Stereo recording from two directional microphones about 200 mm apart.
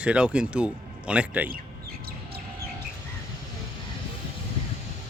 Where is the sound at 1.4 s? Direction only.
50° right (ahead or behind).